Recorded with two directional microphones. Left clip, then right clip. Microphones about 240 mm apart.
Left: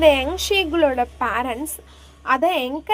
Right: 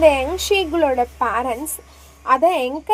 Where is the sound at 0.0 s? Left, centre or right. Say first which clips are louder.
Right 1 dB; left.